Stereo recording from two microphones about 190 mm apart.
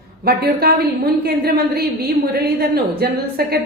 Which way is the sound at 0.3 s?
55° right (ahead or behind).